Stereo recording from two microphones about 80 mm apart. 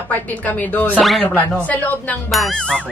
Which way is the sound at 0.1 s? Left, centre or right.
Centre.